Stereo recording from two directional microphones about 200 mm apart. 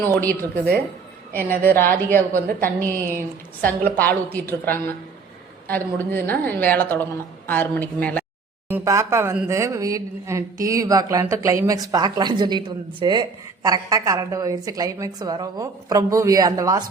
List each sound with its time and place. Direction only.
1.3 s a woman's voice: 10° left (ahead or behind)
8.7 s a woman's voice: 15° right (ahead or behind)